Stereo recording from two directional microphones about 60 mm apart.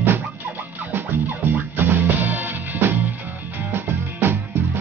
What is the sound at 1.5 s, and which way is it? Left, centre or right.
Music, right.